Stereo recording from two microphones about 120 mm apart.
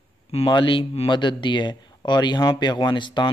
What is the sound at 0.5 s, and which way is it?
Speech, 45° left (ahead or behind).